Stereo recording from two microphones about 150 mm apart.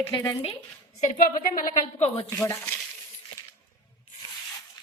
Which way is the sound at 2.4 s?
15° left (ahead or behind).